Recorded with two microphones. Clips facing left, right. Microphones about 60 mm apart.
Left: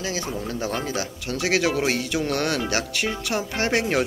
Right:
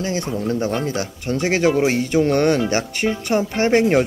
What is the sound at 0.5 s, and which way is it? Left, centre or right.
Speech, right.